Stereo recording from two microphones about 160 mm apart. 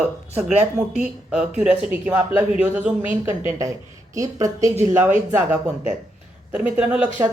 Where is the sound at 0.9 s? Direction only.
5° right (ahead or behind).